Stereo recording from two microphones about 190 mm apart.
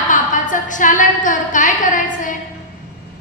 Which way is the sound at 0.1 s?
40° left (ahead or behind).